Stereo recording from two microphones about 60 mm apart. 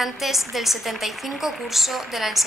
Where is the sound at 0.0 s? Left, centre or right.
Centre.